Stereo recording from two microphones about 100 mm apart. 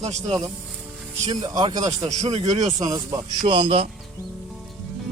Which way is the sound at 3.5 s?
60° right (ahead or behind).